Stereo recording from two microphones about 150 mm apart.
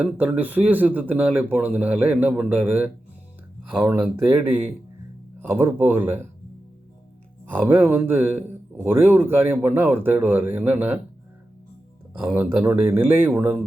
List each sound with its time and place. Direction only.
0.0 s speech: 10° right (ahead or behind)
7.4 s speech: 15° right (ahead or behind)
12.2 s speech: 15° right (ahead or behind)